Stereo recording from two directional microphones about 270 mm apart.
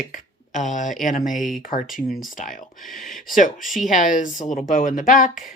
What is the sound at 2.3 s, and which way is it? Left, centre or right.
Speech, left.